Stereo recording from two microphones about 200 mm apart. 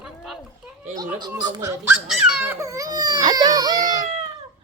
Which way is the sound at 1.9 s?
5° right (ahead or behind).